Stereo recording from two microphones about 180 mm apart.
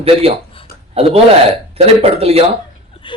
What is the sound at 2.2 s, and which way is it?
Speech, 35° right (ahead or behind).